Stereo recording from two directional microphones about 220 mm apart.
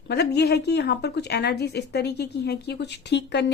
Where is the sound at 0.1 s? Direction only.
50° left (ahead or behind).